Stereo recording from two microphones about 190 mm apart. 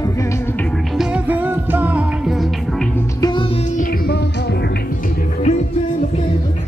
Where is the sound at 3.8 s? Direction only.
55° left (ahead or behind).